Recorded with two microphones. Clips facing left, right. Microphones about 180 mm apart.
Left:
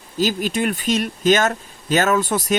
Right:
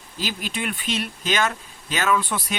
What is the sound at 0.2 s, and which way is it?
Speech, 45° left (ahead or behind).